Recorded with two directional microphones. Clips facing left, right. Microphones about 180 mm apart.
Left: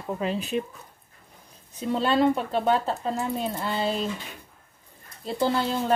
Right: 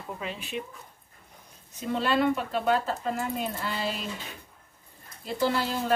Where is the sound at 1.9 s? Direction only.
35° left (ahead or behind).